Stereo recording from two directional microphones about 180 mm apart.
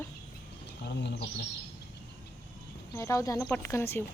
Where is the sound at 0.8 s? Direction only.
70° left (ahead or behind).